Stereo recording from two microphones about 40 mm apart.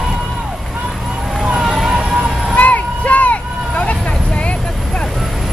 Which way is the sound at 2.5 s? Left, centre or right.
Left.